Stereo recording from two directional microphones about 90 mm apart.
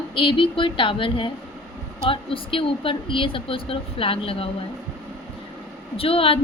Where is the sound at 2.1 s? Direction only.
85° left.